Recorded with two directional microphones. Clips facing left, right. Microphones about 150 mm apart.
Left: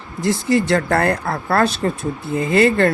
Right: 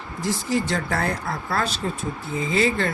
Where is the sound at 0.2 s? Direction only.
70° left (ahead or behind).